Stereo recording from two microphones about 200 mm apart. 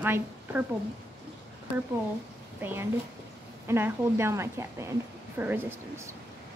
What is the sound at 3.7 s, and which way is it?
A woman's voice, 10° right (ahead or behind).